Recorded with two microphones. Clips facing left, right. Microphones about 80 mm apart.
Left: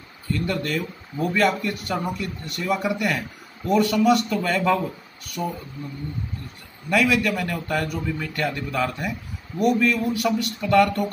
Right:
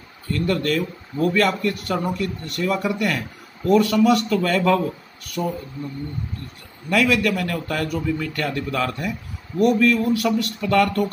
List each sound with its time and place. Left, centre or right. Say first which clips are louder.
0.3 s speech: right 4 dB; centre
5.4 s speech: right 3 dB; centre
6.9 s a man's voice: right 1 dB; centre